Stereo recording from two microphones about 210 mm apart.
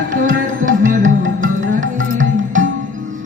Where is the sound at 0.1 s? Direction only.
40° right (ahead or behind).